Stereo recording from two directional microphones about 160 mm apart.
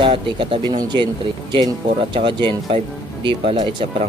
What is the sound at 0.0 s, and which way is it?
Speech, 35° right (ahead or behind).